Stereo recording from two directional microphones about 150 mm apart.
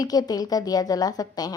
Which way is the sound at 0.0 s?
25° left (ahead or behind).